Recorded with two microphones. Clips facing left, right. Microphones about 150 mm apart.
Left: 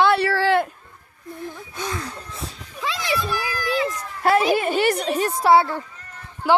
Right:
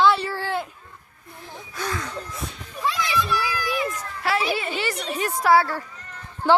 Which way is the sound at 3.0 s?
25° left (ahead or behind).